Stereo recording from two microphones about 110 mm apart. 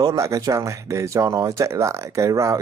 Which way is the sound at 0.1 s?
30° right (ahead or behind).